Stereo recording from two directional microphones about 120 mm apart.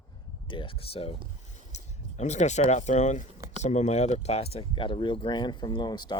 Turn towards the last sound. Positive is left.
turn(degrees=35)  # may be behind; listen again after turning